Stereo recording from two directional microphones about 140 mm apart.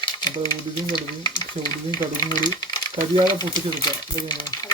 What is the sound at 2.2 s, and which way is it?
Speech, 30° left (ahead or behind).